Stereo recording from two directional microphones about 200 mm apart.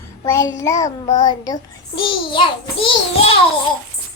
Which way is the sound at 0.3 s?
15° left (ahead or behind).